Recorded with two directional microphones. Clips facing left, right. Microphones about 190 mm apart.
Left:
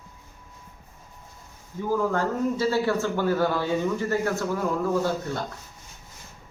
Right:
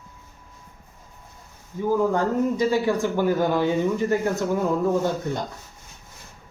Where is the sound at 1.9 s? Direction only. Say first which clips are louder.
Right 3 dB; 15° right (ahead or behind).